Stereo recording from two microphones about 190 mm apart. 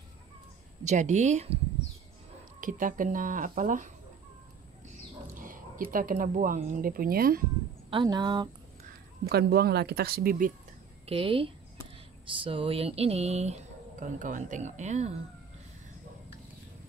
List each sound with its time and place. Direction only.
0.8 s speech: 40° right (ahead or behind)
2.6 s speech: 45° right (ahead or behind)
7.9 s speech: 25° right (ahead or behind)
9.3 s speech: 55° right (ahead or behind)
11.1 s speech: 30° right (ahead or behind)